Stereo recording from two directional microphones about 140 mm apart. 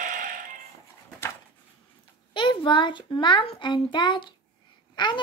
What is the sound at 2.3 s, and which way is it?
A child's voice, 35° left (ahead or behind).